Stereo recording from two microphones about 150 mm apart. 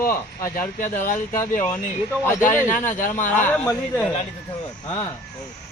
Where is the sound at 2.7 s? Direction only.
60° left (ahead or behind).